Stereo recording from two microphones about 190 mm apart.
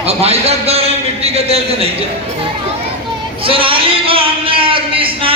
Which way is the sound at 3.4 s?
30° right (ahead or behind).